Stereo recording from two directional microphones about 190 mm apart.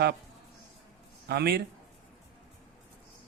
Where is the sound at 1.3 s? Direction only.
55° right (ahead or behind).